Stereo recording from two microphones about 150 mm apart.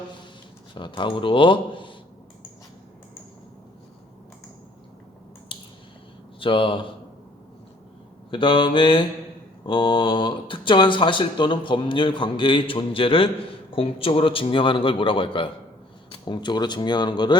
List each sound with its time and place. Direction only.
0.7 s speech: 35° left (ahead or behind)
6.4 s speech: 35° left (ahead or behind)
8.3 s speech: 35° left (ahead or behind)